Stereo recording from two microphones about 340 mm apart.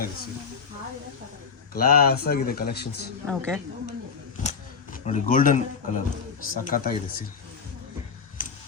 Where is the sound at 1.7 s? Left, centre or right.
Left.